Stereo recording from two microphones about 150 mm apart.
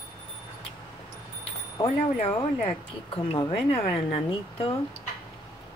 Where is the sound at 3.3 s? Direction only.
35° left (ahead or behind).